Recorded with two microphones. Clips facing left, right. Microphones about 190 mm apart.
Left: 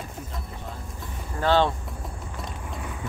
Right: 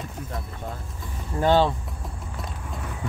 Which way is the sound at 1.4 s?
15° right (ahead or behind).